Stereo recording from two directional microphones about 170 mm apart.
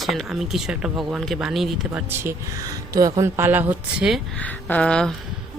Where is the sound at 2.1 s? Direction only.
15° right (ahead or behind).